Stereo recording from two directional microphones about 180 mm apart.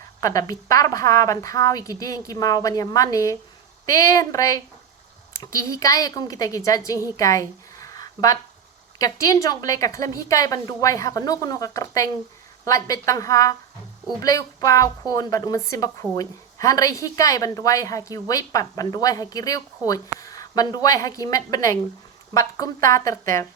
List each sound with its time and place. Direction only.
0.2 s a woman's voice: 20° left (ahead or behind)
7.2 s a sound: 20° left (ahead or behind)
9.0 s a woman's voice: 20° left (ahead or behind)